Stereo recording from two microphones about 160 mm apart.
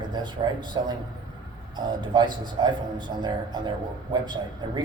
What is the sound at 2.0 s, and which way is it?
Speech, 25° right (ahead or behind).